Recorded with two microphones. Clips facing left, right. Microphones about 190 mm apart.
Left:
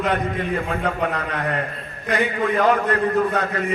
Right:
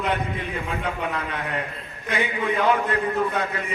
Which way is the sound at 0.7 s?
45° left (ahead or behind).